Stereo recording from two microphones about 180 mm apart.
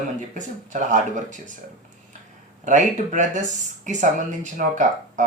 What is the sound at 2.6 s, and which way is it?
Speech, 45° right (ahead or behind).